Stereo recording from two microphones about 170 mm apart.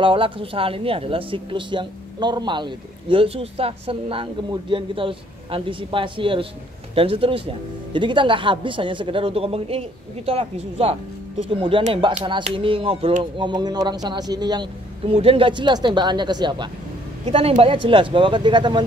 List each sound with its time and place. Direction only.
0.0 s a man's voice: 30° right (ahead or behind)